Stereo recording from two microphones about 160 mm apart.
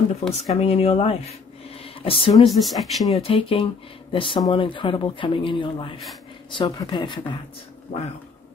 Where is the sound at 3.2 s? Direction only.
35° left (ahead or behind).